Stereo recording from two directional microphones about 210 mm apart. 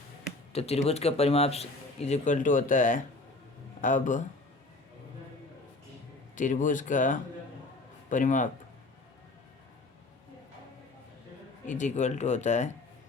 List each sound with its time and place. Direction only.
0.5 s a man's voice: 30° left (ahead or behind)
6.3 s speech: 35° left (ahead or behind)
11.6 s speech: 35° left (ahead or behind)